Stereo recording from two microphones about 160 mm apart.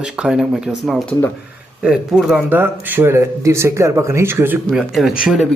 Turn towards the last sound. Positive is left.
turn(degrees=0)  # may be behind; listen again after turning